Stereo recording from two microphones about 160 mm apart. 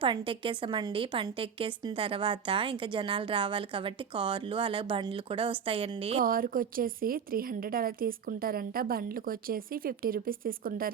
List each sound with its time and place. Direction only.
0.0 s a woman's voice: 30° right (ahead or behind)
6.2 s a woman's voice: 60° right (ahead or behind)